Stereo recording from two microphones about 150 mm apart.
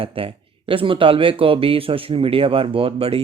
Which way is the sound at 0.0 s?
35° right (ahead or behind).